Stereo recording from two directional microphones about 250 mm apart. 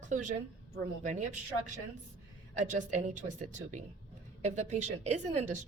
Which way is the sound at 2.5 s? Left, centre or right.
Right.